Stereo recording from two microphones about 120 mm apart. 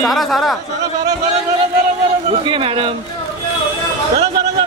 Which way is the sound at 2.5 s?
50° right (ahead or behind).